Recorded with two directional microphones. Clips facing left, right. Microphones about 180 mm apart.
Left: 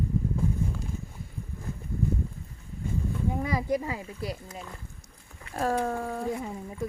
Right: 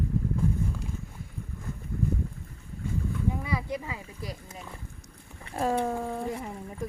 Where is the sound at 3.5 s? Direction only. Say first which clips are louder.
Left 4 dB; 35° left (ahead or behind).